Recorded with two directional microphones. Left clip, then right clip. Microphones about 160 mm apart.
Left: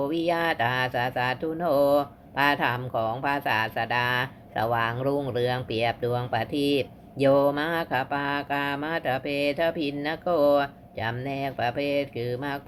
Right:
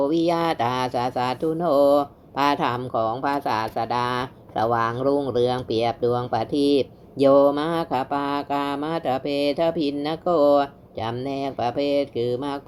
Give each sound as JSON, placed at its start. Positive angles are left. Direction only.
{"t": 0.0, "sound": "speech", "side_deg": -45}